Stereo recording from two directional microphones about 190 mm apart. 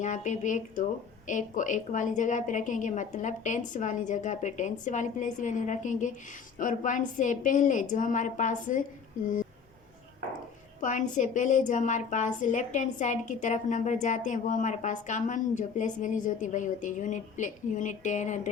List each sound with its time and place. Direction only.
0.0 s a woman's voice: 40° left (ahead or behind)
10.8 s a woman's voice: 40° left (ahead or behind)